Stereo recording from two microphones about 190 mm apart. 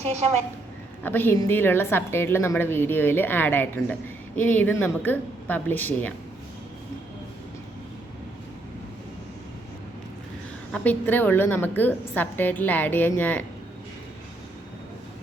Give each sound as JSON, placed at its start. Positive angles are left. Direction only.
{"t": 0.0, "sound": "a woman's voice", "side_deg": -35}
{"t": 1.0, "sound": "a woman's voice", "side_deg": 10}
{"t": 10.7, "sound": "a woman's voice", "side_deg": 10}